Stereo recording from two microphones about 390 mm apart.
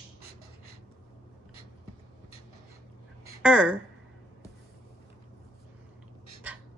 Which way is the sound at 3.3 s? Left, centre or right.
Centre.